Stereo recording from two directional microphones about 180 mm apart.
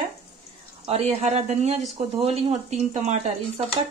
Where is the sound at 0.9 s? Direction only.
35° right (ahead or behind).